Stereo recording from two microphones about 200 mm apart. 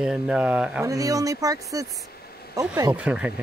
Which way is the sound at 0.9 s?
15° right (ahead or behind).